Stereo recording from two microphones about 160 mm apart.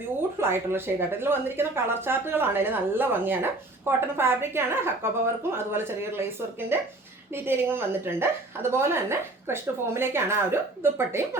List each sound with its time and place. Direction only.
0.2 s a woman's voice: 15° right (ahead or behind)